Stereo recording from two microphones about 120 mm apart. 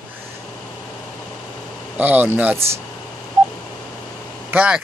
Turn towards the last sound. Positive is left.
turn(degrees=-10)  # may be behind; listen again after turning